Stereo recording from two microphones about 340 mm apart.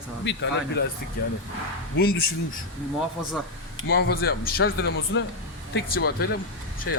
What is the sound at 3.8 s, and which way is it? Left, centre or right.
A man's voice, left.